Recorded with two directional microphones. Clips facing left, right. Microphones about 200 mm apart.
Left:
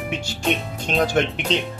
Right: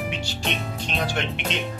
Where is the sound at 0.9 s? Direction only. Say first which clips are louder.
Left 8 dB; 45° left (ahead or behind).